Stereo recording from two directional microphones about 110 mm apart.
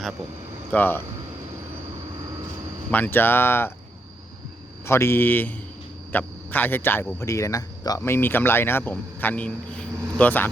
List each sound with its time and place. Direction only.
0.7 s speech: 15° left (ahead or behind)
2.9 s speech: 20° left (ahead or behind)
4.9 s speech: 25° left (ahead or behind)
7.2 s speech: 30° left (ahead or behind)